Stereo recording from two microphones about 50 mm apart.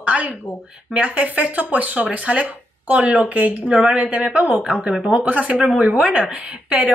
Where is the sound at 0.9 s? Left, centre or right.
Right.